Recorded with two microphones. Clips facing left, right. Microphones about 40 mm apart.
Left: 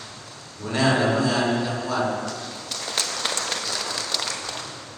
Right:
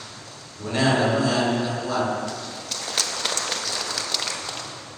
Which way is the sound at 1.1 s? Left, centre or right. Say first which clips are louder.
Even; centre.